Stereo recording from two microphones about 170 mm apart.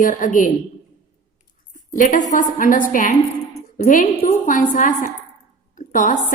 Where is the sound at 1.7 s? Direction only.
45° left (ahead or behind).